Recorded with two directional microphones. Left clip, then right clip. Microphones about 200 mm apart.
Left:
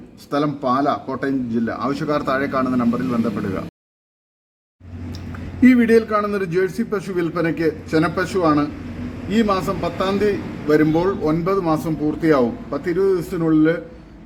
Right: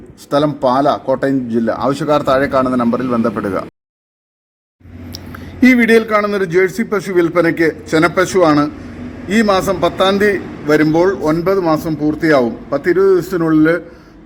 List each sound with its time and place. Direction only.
0.3 s a man's voice: 10° right (ahead or behind)
5.6 s a man's voice: 15° right (ahead or behind)